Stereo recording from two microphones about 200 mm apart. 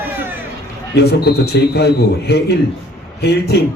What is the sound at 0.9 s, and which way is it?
A man's voice, 55° left (ahead or behind).